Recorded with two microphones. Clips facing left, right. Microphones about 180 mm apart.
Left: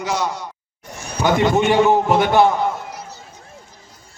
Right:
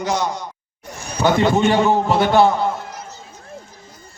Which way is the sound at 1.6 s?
15° left (ahead or behind).